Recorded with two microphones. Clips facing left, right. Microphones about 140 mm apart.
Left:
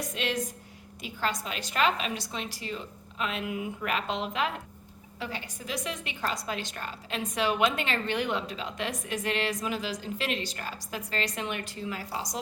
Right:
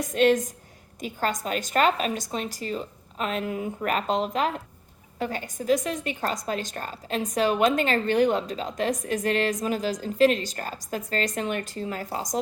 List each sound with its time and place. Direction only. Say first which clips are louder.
0.0 s a woman's voice: right 11 dB; 45° right (ahead or behind)